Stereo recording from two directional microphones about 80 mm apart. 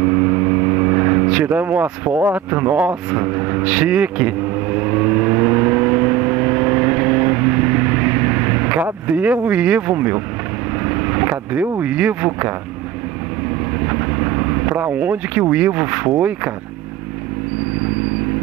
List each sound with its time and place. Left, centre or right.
0.0 s vehicle: right
2.2 s speech: right
3.1 s vehicle: right
11.8 s speech: centre
13.8 s vehicle: right
15.5 s speech: centre